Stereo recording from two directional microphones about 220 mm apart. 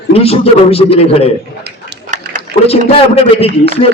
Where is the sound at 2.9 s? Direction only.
25° left (ahead or behind).